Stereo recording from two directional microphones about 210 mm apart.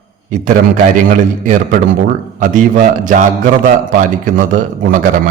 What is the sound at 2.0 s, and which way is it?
A man's voice, 35° right (ahead or behind).